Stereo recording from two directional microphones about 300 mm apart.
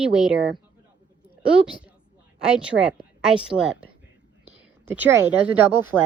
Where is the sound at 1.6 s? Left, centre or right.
Centre.